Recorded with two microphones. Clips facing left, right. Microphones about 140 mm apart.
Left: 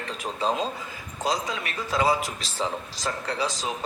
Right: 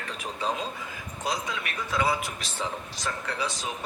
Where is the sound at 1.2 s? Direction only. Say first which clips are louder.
Left 4 dB; 35° left (ahead or behind).